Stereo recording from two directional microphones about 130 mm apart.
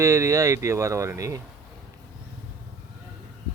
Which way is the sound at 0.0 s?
25° right (ahead or behind).